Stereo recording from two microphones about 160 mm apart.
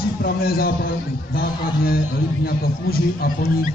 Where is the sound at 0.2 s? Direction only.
75° left (ahead or behind).